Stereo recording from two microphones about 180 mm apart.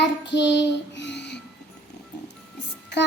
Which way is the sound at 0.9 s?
75° left (ahead or behind).